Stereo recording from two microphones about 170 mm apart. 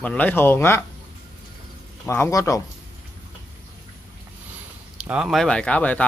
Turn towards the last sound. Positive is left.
turn(degrees=10)  # may be behind; listen again after turning